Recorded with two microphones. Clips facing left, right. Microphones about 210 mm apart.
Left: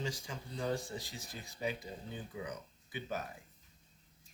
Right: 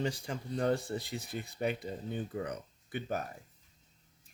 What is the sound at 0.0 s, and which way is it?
Speech, 60° right (ahead or behind).